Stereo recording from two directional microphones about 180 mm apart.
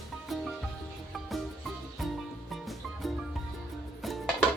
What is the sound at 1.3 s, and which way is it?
Music, centre (ahead or behind).